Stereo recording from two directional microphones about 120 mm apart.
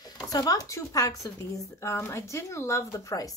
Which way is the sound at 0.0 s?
30° left (ahead or behind).